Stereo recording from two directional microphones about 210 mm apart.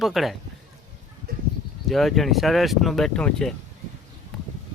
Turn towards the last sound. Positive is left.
turn(degrees=5)  # may be behind; listen again after turning